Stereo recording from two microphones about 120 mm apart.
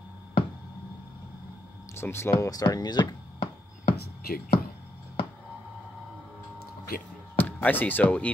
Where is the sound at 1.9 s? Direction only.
20° left (ahead or behind); by 3.1 s 35° left (ahead or behind).